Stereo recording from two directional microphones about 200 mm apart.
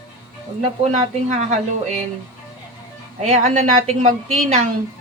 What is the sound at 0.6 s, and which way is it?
Speech, 35° right (ahead or behind).